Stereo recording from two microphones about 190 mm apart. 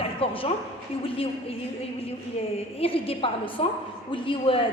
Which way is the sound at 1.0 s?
30° left (ahead or behind).